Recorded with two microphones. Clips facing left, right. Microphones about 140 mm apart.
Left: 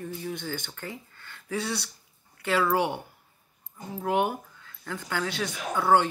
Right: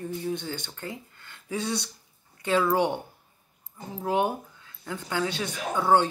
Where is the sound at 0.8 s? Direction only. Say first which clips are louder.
Right 1 dB; 15° right (ahead or behind).